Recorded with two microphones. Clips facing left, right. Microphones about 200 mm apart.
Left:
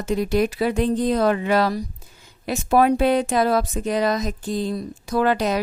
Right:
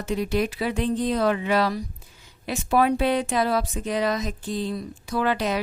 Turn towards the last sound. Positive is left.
turn(degrees=40)  # may be behind; listen again after turning